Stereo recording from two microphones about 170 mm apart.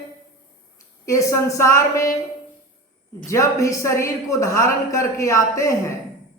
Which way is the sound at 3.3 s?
20° left (ahead or behind).